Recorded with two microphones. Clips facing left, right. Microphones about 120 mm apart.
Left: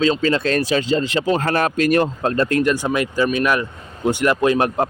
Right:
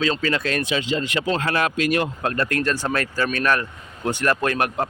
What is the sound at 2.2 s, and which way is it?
Speech, 25° left (ahead or behind).